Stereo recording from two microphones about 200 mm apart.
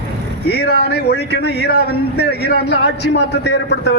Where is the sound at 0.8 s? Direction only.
55° left (ahead or behind).